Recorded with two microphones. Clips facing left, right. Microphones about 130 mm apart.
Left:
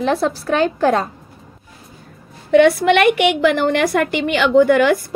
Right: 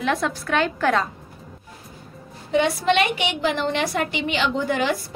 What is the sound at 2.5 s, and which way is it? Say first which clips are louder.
A woman's voice: left 8 dB; 60° left (ahead or behind).